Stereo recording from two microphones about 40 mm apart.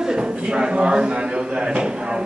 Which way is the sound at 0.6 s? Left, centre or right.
Right.